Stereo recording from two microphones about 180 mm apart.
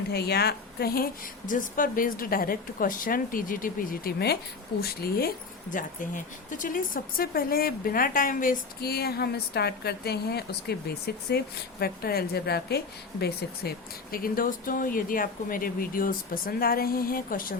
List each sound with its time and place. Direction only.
0.1 s a woman's voice: 65° left (ahead or behind)
5.7 s speech: 45° left (ahead or behind)